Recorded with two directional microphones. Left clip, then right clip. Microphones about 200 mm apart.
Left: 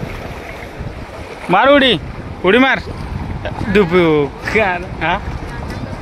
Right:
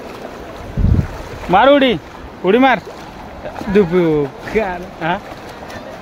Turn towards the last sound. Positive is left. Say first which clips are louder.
# left 4 dB
turn(degrees=0)  # may be behind; listen again after turning